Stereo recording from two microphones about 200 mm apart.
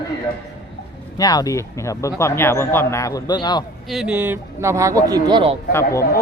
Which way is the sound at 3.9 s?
5° right (ahead or behind).